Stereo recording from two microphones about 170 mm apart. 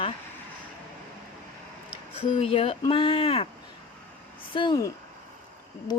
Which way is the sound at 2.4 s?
35° left (ahead or behind).